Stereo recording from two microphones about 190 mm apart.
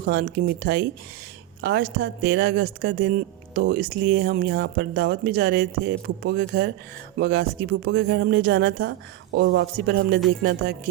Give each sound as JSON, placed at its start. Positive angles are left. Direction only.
{"t": 0.0, "sound": "speech", "side_deg": -55}
{"t": 7.2, "sound": "speech", "side_deg": -55}
{"t": 7.9, "sound": "speech", "side_deg": -75}